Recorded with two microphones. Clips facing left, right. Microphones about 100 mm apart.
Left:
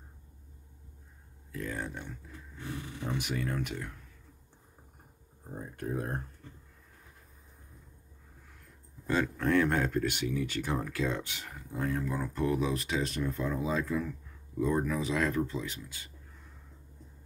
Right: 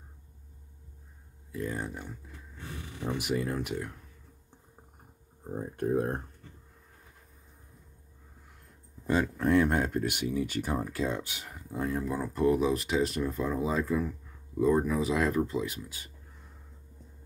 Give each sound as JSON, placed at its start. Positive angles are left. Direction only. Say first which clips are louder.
{"t": 1.5, "sound": "speech", "louder": "right 2 dB", "side_deg": -15}
{"t": 3.3, "sound": "speech", "louder": "right 3 dB", "side_deg": -20}
{"t": 5.4, "sound": "speech", "louder": "right 7 dB", "side_deg": -25}
{"t": 9.0, "sound": "speech", "louder": "right 2 dB", "side_deg": -15}